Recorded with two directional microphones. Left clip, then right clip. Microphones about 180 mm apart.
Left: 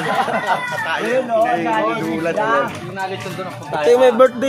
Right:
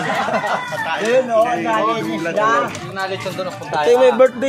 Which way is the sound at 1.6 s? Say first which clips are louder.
Right 1 dB; 50° right (ahead or behind).